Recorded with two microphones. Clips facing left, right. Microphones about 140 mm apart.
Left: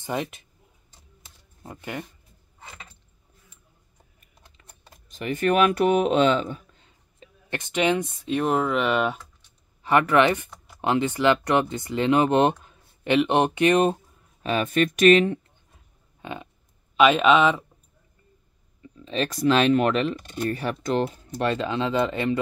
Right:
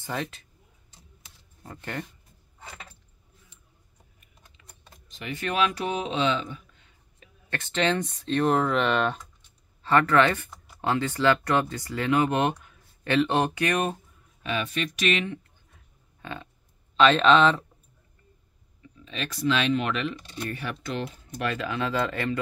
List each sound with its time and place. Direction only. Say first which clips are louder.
0.0 s speech: left 4 dB; 20° left (ahead or behind)
1.6 s speech: left 1 dB; 15° left (ahead or behind)
5.1 s speech: left 8 dB; 45° left (ahead or behind)
7.2 s speech: left 3 dB; 15° left (ahead or behind)
9.8 s speech: left 2 dB; 15° left (ahead or behind)
13.0 s speech: left 3 dB; 20° left (ahead or behind)
14.4 s speech: left 7 dB; 45° left (ahead or behind)
16.2 s a sound: left 3 dB; 20° left (ahead or behind)
16.9 s speech: left 1 dB; 10° left (ahead or behind)
19.0 s speech: left 5 dB; 40° left (ahead or behind); by 22.4 s 20° left (ahead or behind)